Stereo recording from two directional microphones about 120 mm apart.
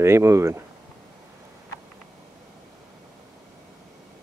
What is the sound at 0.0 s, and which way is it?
Speech, 20° right (ahead or behind).